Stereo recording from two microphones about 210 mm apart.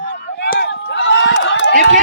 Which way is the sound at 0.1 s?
55° left (ahead or behind).